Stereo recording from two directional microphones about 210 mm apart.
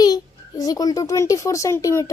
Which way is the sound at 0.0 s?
20° left (ahead or behind).